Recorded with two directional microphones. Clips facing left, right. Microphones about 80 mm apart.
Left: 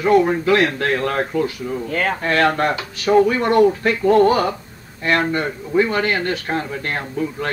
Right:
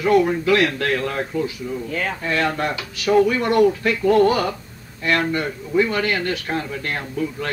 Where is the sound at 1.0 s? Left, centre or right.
Left.